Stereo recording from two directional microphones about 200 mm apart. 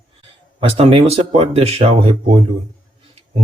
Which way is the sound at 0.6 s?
30° right (ahead or behind).